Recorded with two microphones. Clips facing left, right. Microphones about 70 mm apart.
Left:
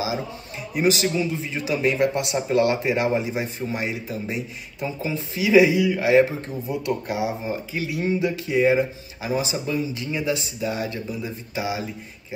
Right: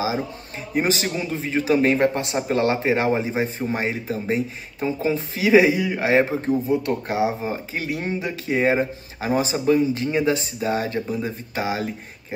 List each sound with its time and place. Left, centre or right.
0.0 s a man's voice: right